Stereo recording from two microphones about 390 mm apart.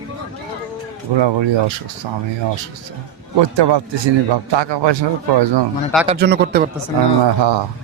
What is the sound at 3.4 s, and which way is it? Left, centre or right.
Speech, right.